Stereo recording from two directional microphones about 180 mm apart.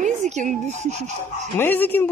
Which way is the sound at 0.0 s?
40° right (ahead or behind).